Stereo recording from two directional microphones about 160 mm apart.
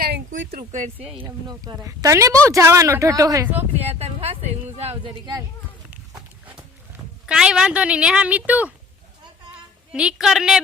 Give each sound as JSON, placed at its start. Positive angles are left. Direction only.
{"t": 0.0, "sound": "a sound", "side_deg": -75}
{"t": 0.9, "sound": "speech", "side_deg": -5}
{"t": 1.5, "sound": "speech", "side_deg": -20}
{"t": 3.6, "sound": "speech", "side_deg": -40}
{"t": 5.9, "sound": "horse", "side_deg": -5}
{"t": 7.3, "sound": "speech", "side_deg": -5}
{"t": 9.9, "sound": "a woman's voice", "side_deg": -5}